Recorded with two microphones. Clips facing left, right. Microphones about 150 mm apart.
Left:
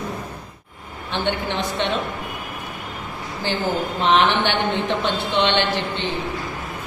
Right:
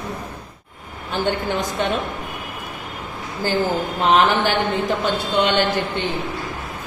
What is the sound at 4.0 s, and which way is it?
Speech, 40° right (ahead or behind).